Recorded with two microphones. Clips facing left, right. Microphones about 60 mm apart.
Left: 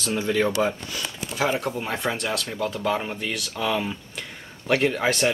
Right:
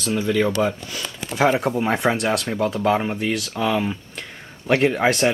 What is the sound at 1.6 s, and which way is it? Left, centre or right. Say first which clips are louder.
Speech: right 7 dB; centre.